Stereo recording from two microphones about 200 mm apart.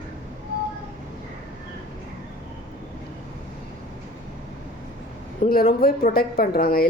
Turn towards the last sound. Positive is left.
turn(degrees=50)  # may be behind; listen again after turning